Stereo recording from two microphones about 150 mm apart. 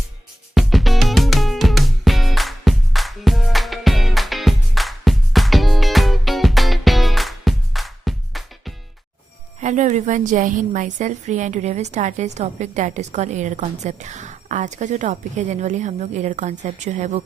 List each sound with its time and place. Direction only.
0.5 s music: centre (ahead or behind)
9.6 s a woman's voice: 50° right (ahead or behind)